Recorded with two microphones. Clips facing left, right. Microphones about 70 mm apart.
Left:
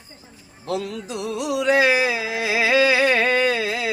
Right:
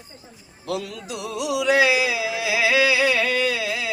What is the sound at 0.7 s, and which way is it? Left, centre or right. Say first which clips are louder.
Music: left 2 dB; left.